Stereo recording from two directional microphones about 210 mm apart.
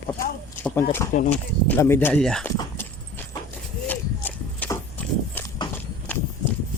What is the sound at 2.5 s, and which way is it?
Horse, 15° left (ahead or behind).